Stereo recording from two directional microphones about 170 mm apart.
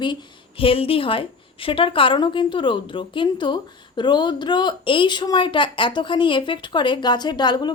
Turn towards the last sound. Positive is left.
turn(degrees=25)  # may be behind; listen again after turning